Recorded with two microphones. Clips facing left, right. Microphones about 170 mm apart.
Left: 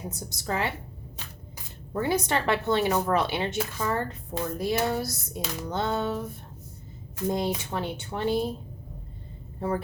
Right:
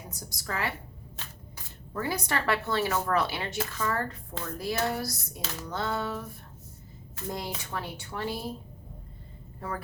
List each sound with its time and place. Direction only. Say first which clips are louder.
0.1 s speech: left 4 dB; 25° left (ahead or behind)
1.9 s speech: left 5 dB; 25° left (ahead or behind)
7.3 s speech: left 8 dB; 20° left (ahead or behind)
9.6 s speech: left 8 dB; 30° left (ahead or behind)